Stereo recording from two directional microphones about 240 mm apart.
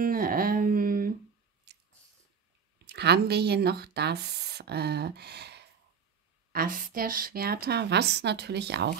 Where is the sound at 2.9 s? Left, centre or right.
Right.